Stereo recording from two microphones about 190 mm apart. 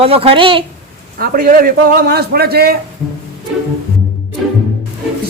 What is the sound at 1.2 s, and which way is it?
Speech, 50° right (ahead or behind).